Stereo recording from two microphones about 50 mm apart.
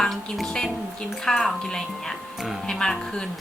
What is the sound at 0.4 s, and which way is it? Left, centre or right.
Speech, centre.